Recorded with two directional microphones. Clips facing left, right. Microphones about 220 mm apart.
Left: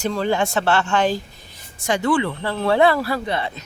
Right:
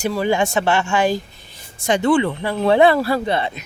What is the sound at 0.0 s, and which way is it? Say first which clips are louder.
Speech: right 2 dB; 10° right (ahead or behind).